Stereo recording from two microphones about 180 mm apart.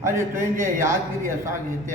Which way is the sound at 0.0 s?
15° right (ahead or behind).